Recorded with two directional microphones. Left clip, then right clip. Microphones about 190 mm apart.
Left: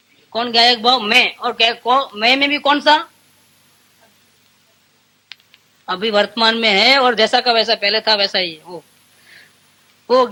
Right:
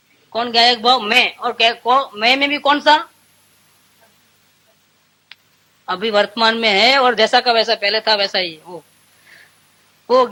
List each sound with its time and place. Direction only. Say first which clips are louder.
0.3 s a man's voice: even; 30° right (ahead or behind)
5.3 s a sound: left 4 dB; 40° right (ahead or behind)
5.8 s a man's voice: even; 35° right (ahead or behind)